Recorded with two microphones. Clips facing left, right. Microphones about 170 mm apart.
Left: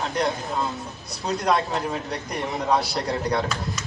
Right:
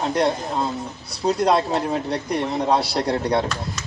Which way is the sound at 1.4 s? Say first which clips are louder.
Right 2 dB; 30° right (ahead or behind).